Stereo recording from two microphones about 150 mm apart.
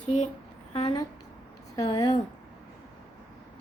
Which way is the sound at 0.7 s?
40° left (ahead or behind).